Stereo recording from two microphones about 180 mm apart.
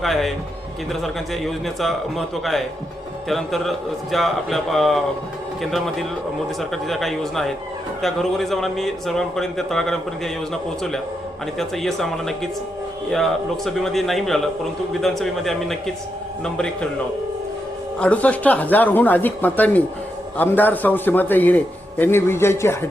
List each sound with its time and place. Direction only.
0.0 s speech: centre (ahead or behind)
18.0 s a man's voice: 10° left (ahead or behind)